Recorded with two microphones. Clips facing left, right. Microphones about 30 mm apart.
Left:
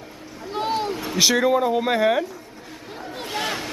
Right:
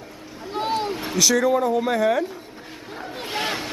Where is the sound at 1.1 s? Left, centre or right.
Left.